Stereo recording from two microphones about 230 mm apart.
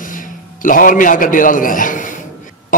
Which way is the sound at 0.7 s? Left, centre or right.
Left.